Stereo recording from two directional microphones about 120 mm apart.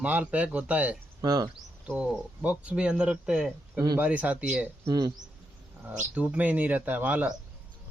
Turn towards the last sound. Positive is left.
turn(degrees=-15)  # may be behind; listen again after turning